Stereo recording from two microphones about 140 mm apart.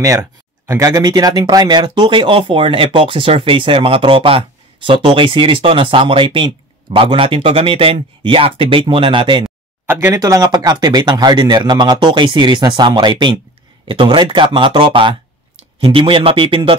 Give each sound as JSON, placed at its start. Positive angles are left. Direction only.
{"t": 0.0, "sound": "speech", "side_deg": -25}
{"t": 9.8, "sound": "speech", "side_deg": -15}
{"t": 10.1, "sound": "speech", "side_deg": -25}